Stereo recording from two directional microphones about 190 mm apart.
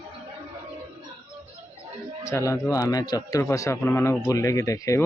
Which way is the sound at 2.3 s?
15° left (ahead or behind).